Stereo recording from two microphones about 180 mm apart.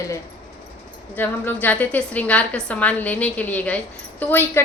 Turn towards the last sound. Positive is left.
turn(degrees=10)  # may be behind; listen again after turning